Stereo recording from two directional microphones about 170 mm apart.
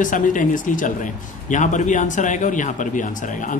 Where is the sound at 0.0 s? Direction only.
50° left (ahead or behind).